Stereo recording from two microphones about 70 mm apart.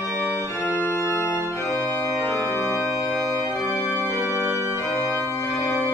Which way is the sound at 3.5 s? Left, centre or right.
Centre.